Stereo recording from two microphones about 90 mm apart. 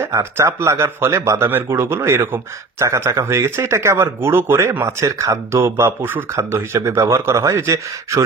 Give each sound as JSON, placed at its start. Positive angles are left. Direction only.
{"t": 0.0, "sound": "speech", "side_deg": -30}